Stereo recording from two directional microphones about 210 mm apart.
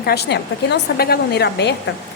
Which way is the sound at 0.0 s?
50° left (ahead or behind).